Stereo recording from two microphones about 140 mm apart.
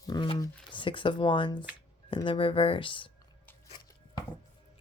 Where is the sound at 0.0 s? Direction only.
30° left (ahead or behind).